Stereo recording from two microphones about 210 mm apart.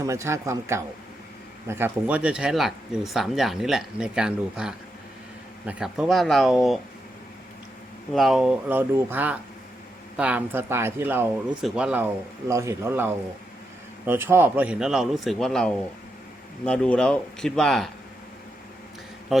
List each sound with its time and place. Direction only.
0.0 s speech: 15° right (ahead or behind)
8.1 s speech: centre (ahead or behind)
19.3 s speech: centre (ahead or behind)